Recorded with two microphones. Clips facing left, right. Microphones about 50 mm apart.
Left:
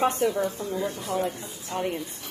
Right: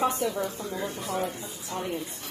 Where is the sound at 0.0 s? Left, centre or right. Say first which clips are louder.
Left 3 dB; left.